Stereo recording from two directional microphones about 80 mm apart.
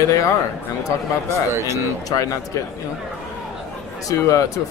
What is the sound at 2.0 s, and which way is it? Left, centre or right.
Speech, left.